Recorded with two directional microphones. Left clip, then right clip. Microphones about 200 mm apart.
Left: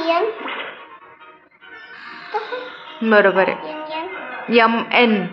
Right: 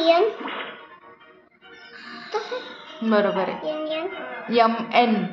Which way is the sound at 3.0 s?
25° left (ahead or behind).